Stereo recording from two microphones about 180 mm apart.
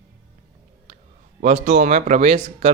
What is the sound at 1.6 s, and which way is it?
Speech, 40° right (ahead or behind).